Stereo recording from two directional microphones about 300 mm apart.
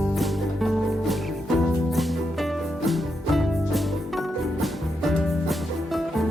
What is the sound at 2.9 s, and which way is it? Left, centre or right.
Music, centre.